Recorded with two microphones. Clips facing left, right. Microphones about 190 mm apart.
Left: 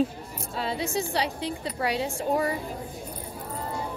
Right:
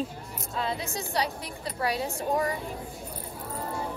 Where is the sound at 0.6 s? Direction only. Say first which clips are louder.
Left 3 dB; 30° left (ahead or behind).